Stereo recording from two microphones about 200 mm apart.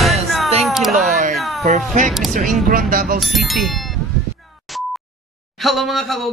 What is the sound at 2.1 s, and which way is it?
Speech, centre (ahead or behind).